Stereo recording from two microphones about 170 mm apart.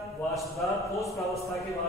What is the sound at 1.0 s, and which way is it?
Speech, 20° left (ahead or behind).